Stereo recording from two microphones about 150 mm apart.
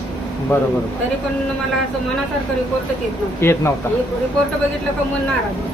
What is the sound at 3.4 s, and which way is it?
Speech, 15° left (ahead or behind).